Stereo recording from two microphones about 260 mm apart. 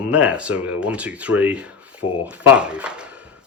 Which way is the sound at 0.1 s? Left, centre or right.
Centre.